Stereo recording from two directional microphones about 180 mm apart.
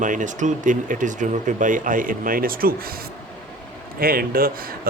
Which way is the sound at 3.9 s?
55° right (ahead or behind).